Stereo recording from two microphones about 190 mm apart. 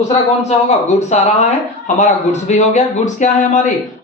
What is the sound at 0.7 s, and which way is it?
Speech, 35° left (ahead or behind).